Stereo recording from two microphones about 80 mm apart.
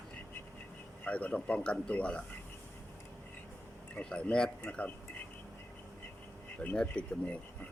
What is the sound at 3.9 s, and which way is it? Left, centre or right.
Speech, centre.